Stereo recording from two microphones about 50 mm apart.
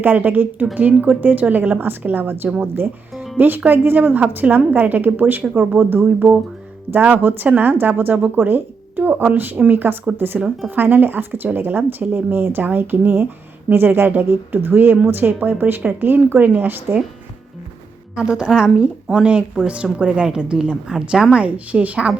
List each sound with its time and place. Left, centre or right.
0.0 s speech: right
18.1 s a woman's voice: centre
21.3 s a woman's voice: right